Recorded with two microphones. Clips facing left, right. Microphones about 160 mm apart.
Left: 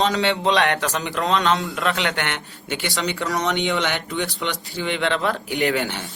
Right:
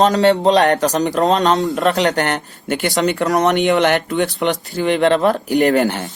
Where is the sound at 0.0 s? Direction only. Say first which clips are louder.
Right 8 dB; 45° right (ahead or behind).